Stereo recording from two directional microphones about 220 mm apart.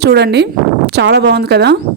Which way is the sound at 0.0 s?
50° right (ahead or behind).